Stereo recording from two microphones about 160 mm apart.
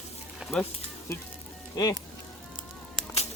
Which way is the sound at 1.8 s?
25° left (ahead or behind).